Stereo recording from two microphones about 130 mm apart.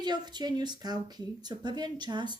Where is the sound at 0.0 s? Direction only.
35° right (ahead or behind).